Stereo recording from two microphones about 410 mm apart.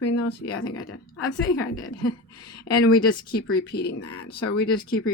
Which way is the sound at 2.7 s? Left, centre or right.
Left.